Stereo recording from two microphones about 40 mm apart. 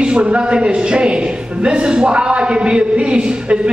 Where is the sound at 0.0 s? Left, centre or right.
Right.